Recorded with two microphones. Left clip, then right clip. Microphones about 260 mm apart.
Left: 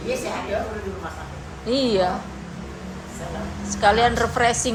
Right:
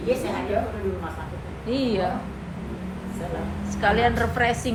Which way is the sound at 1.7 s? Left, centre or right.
Left.